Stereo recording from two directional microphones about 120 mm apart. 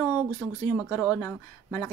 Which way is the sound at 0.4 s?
15° left (ahead or behind).